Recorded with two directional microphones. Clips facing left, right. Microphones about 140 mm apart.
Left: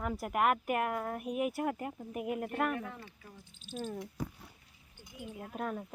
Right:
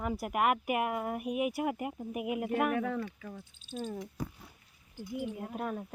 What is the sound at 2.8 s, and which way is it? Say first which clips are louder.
Speech: right 10 dB; 85° right.